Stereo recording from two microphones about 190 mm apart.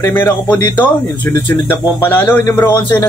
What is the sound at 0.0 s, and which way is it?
Speech, 20° left (ahead or behind).